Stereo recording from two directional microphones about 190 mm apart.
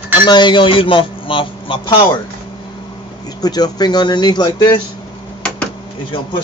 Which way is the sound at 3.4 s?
20° left (ahead or behind).